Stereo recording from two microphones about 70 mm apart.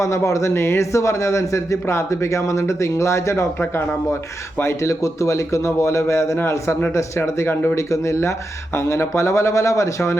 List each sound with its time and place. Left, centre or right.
0.0 s speech: left
4.6 s speech: left
7.8 s speech: left